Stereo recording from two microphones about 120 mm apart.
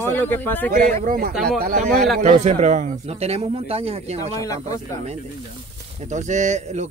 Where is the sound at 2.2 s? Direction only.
65° right (ahead or behind).